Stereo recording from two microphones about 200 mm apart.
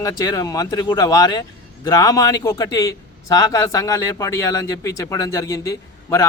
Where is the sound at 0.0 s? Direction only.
15° left (ahead or behind).